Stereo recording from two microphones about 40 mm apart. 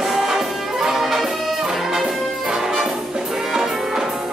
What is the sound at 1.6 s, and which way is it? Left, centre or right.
Brass instrument, centre.